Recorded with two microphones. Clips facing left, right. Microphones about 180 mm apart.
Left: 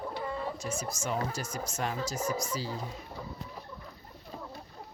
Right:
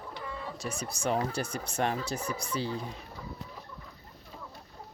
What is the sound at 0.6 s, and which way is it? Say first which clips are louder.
Speech: right 2 dB; 65° right (ahead or behind).